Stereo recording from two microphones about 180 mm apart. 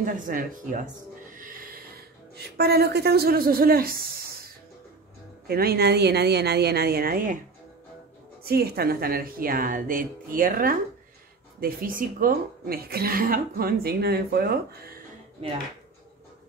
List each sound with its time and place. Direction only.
0.0 s speech: 45° right (ahead or behind)
5.5 s a woman's voice: 60° right (ahead or behind)
8.5 s a woman's voice: 60° right (ahead or behind)
15.4 s speech: 35° right (ahead or behind)